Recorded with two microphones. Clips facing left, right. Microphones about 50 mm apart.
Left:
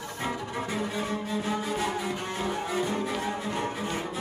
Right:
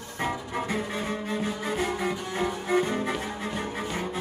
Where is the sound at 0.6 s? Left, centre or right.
Right.